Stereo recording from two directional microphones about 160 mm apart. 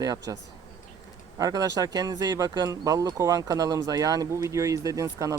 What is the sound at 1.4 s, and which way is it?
Speech, 20° right (ahead or behind).